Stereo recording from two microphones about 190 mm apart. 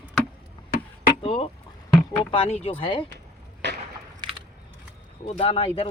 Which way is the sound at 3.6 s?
65° right (ahead or behind).